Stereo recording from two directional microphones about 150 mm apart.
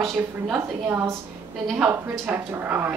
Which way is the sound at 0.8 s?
15° right (ahead or behind).